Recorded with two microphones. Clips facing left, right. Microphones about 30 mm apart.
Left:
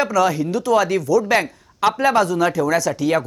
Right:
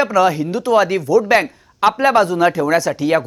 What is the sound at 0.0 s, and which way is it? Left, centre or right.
Speech, centre.